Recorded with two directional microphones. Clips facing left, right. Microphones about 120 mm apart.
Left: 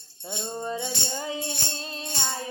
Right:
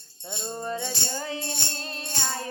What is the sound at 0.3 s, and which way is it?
Speech, 10° left (ahead or behind).